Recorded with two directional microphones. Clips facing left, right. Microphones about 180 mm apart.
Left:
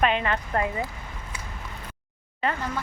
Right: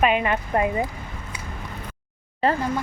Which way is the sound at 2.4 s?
35° right (ahead or behind).